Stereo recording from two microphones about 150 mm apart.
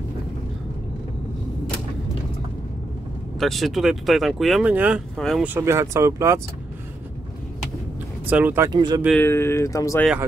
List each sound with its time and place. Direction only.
3.3 s speech: centre (ahead or behind)
5.1 s speech: centre (ahead or behind)
5.4 s speech: 15° right (ahead or behind)
8.3 s speech: 10° right (ahead or behind)
8.6 s speech: 25° right (ahead or behind)
9.1 s speech: 15° left (ahead or behind)